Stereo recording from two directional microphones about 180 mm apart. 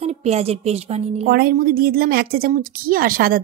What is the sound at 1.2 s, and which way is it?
A woman's voice, 55° right (ahead or behind).